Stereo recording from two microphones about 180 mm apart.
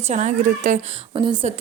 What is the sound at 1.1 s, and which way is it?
Speech, 25° right (ahead or behind).